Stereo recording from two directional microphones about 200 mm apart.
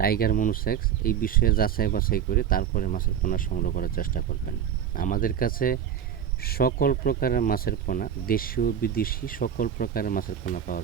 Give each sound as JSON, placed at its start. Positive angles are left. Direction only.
{"t": 0.0, "sound": "speech", "side_deg": 50}